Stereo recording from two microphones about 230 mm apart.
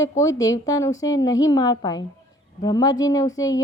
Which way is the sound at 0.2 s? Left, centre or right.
Centre.